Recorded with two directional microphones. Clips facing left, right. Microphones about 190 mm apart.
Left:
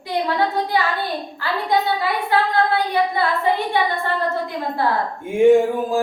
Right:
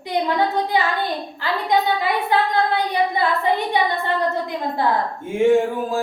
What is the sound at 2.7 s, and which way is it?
Speech, 20° right (ahead or behind).